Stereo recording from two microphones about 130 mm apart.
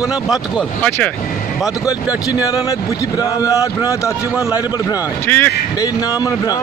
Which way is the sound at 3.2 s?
25° left (ahead or behind).